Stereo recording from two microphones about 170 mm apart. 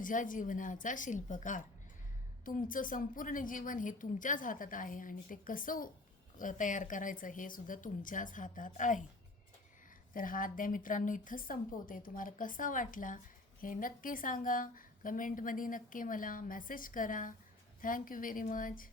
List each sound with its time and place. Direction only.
0.0 s a woman's voice: 50° left (ahead or behind)
10.2 s a woman's voice: 55° left (ahead or behind)